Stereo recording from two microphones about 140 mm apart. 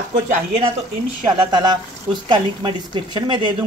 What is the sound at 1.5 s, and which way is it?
A woman's voice, 30° right (ahead or behind).